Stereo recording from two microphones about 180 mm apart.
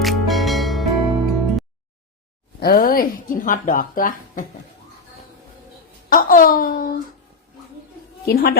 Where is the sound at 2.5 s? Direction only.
55° left (ahead or behind).